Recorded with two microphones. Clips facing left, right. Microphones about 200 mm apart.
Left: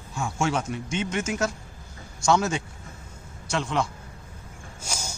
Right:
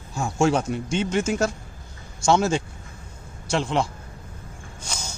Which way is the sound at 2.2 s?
30° right (ahead or behind).